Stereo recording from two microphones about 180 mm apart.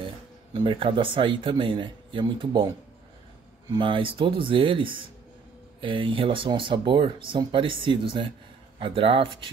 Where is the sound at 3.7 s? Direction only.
30° right (ahead or behind).